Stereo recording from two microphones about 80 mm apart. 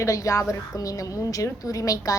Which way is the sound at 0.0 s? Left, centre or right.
Left.